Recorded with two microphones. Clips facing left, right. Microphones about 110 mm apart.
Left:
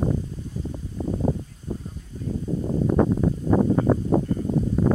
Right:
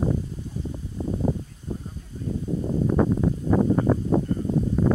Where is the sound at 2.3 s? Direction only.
5° left (ahead or behind).